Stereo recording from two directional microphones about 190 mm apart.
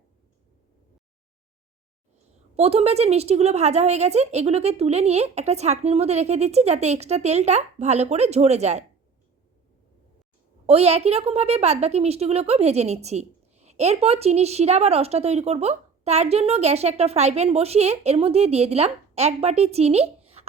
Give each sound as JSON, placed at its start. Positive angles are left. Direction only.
{"t": 2.6, "sound": "a woman's voice", "side_deg": -35}
{"t": 10.7, "sound": "a woman's voice", "side_deg": -30}